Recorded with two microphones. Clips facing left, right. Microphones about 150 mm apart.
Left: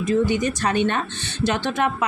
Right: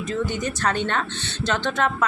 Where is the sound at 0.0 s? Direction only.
10° left (ahead or behind).